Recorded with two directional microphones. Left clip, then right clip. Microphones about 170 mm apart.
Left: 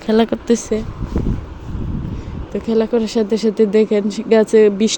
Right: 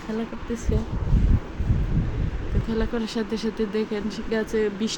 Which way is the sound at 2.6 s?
35° left (ahead or behind).